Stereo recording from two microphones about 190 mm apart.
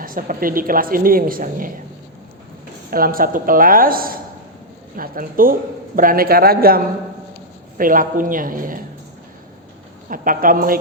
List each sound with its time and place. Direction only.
0.0 s a woman's voice: 45° right (ahead or behind)
2.9 s a woman's voice: 50° right (ahead or behind)
10.1 s a woman's voice: 45° right (ahead or behind)